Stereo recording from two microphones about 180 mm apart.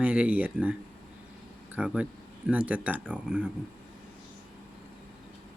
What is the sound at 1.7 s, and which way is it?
Speech, 5° right (ahead or behind).